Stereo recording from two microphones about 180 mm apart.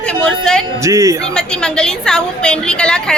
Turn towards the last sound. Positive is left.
turn(degrees=5)  # may be behind; listen again after turning